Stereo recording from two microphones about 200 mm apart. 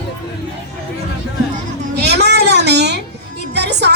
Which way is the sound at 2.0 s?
55° right (ahead or behind).